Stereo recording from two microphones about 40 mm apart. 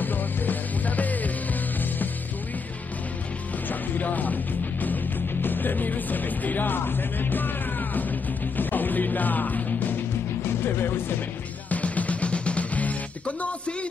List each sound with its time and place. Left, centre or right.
0.0 s music: left
3.6 s music: left
10.4 s music: left
11.7 s music: left
13.4 s a sound: left